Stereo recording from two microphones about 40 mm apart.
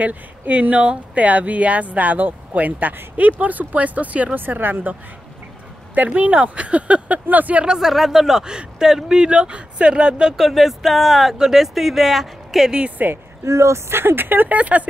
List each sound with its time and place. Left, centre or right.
0.0 s speech: right
4.4 s speech: right
5.9 s speech: right
7.8 s speech: centre
9.3 s speech: right
10.3 s speech: centre
11.3 s speech: centre
11.6 s speech: centre
13.0 s speech: right
13.8 s speech: right
14.6 s speech: right